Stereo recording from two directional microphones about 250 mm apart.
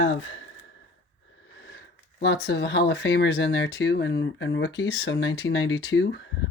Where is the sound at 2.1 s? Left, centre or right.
Left.